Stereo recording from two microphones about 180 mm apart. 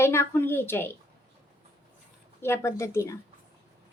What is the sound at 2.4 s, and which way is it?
Speech, 15° left (ahead or behind).